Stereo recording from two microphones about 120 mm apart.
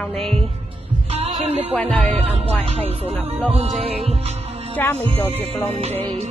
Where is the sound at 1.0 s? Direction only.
60° right (ahead or behind).